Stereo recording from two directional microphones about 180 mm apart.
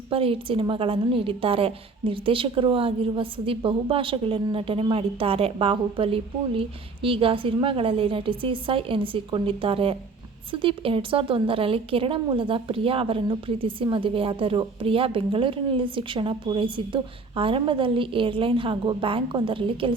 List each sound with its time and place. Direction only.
0.1 s a woman's voice: 30° right (ahead or behind)